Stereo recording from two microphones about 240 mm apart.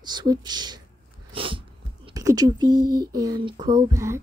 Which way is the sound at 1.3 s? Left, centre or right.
Right.